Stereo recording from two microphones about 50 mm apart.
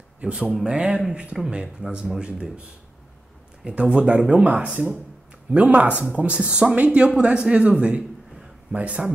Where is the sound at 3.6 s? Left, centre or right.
Right.